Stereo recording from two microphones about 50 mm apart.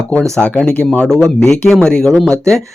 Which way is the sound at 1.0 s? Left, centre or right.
Centre.